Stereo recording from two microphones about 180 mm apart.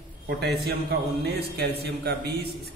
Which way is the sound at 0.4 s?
65° right (ahead or behind).